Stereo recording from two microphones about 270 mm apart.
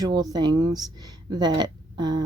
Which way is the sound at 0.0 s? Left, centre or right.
Centre.